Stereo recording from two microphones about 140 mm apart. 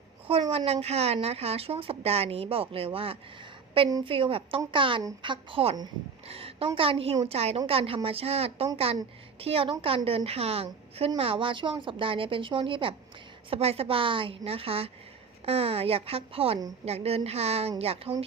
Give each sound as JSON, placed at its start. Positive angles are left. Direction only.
{"t": 0.5, "sound": "a woman's voice", "side_deg": -45}